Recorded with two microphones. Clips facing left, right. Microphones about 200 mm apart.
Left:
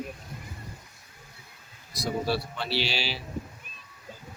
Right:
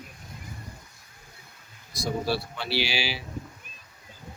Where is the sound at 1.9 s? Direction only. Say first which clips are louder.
Even; centre (ahead or behind).